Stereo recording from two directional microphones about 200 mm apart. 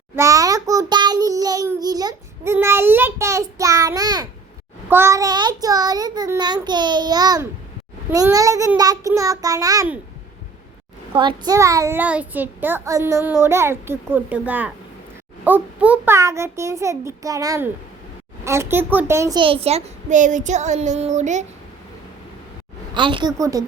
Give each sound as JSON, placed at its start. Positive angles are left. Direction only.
{"t": 0.2, "sound": "child singing", "side_deg": -15}
{"t": 8.1, "sound": "a child's voice", "side_deg": -15}
{"t": 11.1, "sound": "a child's voice", "side_deg": -25}
{"t": 23.0, "sound": "child singing", "side_deg": -25}